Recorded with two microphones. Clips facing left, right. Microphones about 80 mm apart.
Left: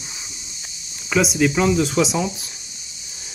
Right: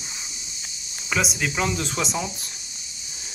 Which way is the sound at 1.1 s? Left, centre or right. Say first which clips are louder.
Left 7 dB; centre.